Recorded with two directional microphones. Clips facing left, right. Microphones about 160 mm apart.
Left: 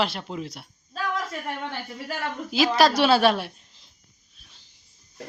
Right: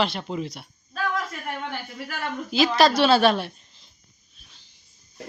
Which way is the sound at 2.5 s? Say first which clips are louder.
Right 1 dB; 10° left (ahead or behind).